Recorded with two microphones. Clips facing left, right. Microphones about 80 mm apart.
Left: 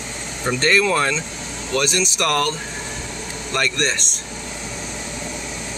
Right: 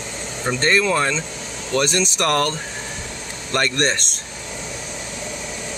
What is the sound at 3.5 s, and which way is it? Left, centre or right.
Speech, right.